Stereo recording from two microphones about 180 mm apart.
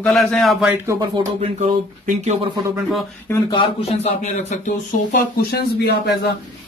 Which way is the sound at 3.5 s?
30° left (ahead or behind).